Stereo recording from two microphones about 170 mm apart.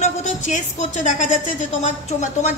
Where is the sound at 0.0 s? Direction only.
45° left (ahead or behind).